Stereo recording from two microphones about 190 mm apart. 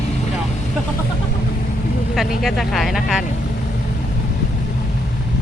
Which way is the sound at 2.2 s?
Centre (ahead or behind).